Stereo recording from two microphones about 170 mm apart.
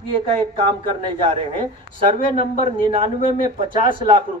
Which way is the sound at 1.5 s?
30° right (ahead or behind).